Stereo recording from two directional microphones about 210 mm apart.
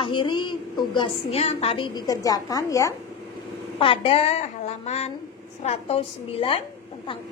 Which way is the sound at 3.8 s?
25° left (ahead or behind).